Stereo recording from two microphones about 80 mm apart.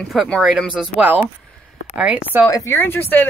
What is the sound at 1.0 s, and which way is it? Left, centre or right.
Speech, right.